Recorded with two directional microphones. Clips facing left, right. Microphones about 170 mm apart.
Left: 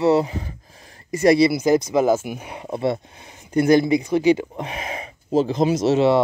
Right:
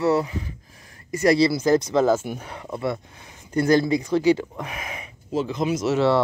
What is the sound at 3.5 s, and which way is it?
Speech, 20° left (ahead or behind).